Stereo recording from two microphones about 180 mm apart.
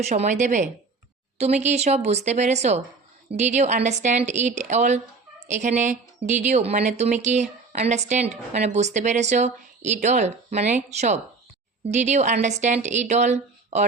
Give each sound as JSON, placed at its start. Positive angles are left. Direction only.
{"t": 0.0, "sound": "speech", "side_deg": -40}